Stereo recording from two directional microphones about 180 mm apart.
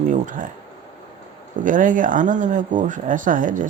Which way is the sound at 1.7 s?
45° right (ahead or behind).